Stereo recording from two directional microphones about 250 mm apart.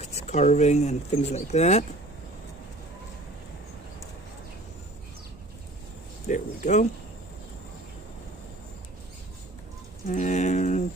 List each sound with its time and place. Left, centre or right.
0.0 s speech: left
6.2 s a sound: left
10.1 s speech: left